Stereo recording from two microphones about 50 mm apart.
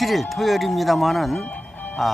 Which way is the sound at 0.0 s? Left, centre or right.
Centre.